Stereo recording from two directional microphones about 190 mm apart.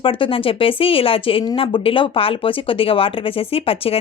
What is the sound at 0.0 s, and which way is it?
Speech, 30° left (ahead or behind).